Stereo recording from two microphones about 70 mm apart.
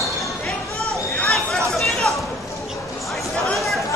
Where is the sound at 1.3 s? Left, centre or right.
Centre.